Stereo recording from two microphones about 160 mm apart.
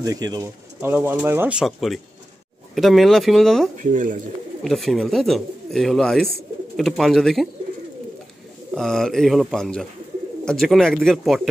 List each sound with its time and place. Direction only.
0.0 s speech: 25° right (ahead or behind)
0.7 s speech: 10° right (ahead or behind)
3.7 s speech: 50° right (ahead or behind)
4.6 s speech: centre (ahead or behind)
8.7 s speech: 5° left (ahead or behind)